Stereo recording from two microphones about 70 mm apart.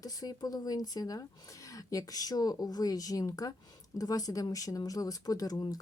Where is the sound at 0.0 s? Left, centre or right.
Left.